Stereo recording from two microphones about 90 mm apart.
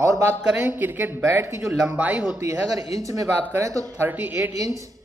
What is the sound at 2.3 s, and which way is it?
A man's voice, 35° right (ahead or behind).